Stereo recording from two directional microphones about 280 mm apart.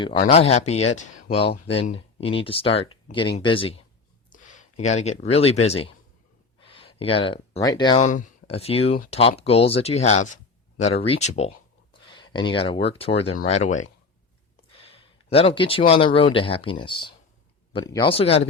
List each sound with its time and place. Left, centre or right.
0.0 s speech: centre
4.3 s a sound: left
4.8 s speech: left
7.9 s speech: left